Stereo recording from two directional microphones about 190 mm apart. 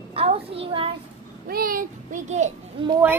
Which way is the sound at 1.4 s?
50° right (ahead or behind).